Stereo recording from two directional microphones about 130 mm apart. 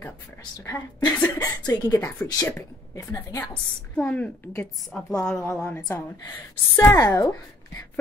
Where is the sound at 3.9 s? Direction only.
10° left (ahead or behind).